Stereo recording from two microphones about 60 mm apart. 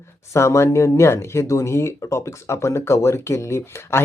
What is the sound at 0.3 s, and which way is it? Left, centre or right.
Speech, left.